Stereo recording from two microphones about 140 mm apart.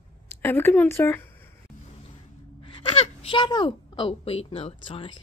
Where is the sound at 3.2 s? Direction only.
35° left (ahead or behind).